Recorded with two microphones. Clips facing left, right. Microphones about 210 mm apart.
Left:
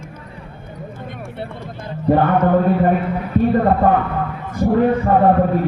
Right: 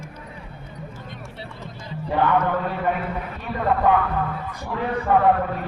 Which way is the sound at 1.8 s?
50° left (ahead or behind).